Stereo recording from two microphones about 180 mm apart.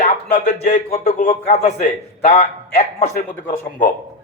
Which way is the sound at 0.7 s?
35° left (ahead or behind).